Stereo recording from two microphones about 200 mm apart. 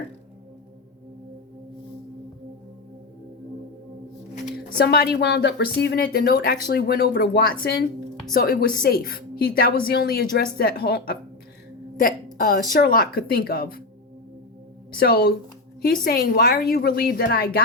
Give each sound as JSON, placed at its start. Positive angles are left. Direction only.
{"t": 4.9, "sound": "speech", "side_deg": 50}
{"t": 14.9, "sound": "speech", "side_deg": 50}